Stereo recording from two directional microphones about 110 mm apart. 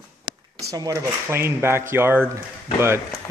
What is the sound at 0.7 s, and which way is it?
Speech, 30° right (ahead or behind).